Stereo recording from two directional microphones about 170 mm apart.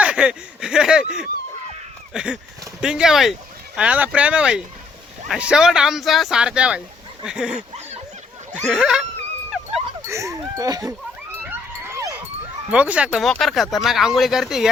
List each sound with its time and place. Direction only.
0.0 s a sound: 5° right (ahead or behind)
2.1 s speech: 5° right (ahead or behind)
8.5 s speech: 5° left (ahead or behind)
9.5 s dog: centre (ahead or behind)
10.0 s speech: 20° right (ahead or behind)
11.4 s a sound: 15° right (ahead or behind)
12.7 s speech: 5° right (ahead or behind)